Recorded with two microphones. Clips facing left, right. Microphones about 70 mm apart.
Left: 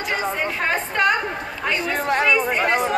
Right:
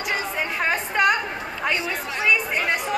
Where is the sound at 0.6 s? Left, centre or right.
Centre.